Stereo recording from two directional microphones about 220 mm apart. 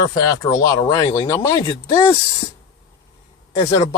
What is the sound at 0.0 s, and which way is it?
Speech, 15° left (ahead or behind).